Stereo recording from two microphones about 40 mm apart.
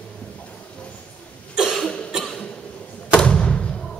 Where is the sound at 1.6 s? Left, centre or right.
Centre.